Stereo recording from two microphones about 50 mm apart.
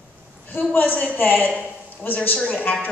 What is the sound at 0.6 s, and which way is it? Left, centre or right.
A woman's voice, left.